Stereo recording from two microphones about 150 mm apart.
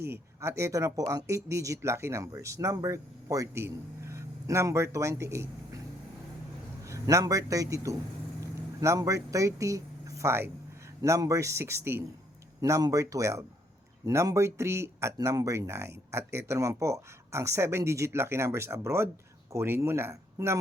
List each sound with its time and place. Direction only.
0.1 s speech: 20° right (ahead or behind)
6.8 s a man's voice: 20° right (ahead or behind)